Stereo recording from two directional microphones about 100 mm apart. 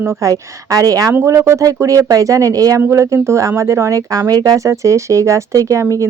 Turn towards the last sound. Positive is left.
turn(degrees=-30)  # may be behind; listen again after turning